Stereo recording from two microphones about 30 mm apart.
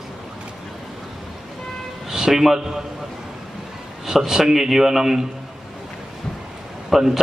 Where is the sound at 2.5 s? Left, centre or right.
Centre.